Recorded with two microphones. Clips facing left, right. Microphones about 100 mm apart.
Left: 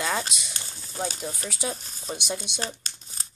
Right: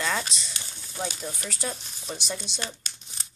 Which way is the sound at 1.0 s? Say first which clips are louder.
Left 2 dB; 35° left (ahead or behind).